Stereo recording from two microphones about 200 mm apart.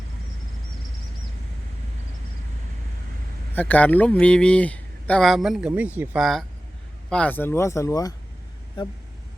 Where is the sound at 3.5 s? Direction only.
10° left (ahead or behind).